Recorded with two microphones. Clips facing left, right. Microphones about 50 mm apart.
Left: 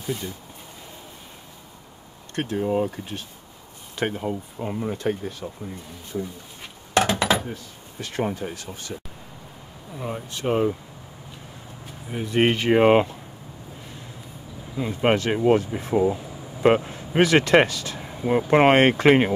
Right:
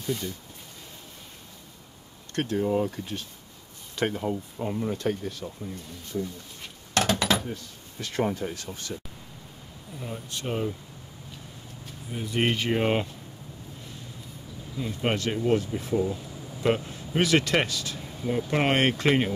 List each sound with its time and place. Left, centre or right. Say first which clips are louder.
0.0 s speech: left 1 dB; centre
2.3 s speech: left 2 dB; left
6.9 s a sound: left 4 dB; centre
8.0 s speech: left 1 dB; left
9.9 s speech: left 5 dB; left
12.1 s speech: left 6 dB; left
14.8 s speech: left 7 dB; left
15.7 s air conditioning: left 5 dB; left
16.6 s speech: left 7 dB; left